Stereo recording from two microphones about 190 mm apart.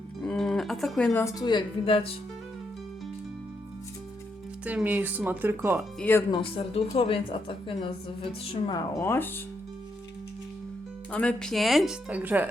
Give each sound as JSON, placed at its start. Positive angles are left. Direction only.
{"t": 0.2, "sound": "music", "side_deg": 5}
{"t": 1.2, "sound": "a woman's voice", "side_deg": 20}
{"t": 4.6, "sound": "speech", "side_deg": -10}
{"t": 6.0, "sound": "speech", "side_deg": 10}
{"t": 6.3, "sound": "a woman's voice", "side_deg": 30}
{"t": 9.0, "sound": "speech", "side_deg": 10}
{"t": 11.1, "sound": "speech", "side_deg": 5}